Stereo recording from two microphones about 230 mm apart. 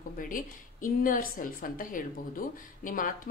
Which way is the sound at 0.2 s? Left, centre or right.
Left.